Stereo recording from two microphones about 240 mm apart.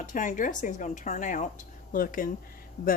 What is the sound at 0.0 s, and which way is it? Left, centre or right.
Speech, left.